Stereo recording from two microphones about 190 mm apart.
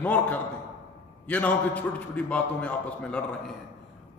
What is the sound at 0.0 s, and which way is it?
A man's voice, 10° left (ahead or behind).